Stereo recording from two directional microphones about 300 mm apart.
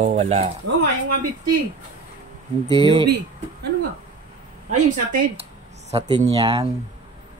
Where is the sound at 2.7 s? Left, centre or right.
Centre.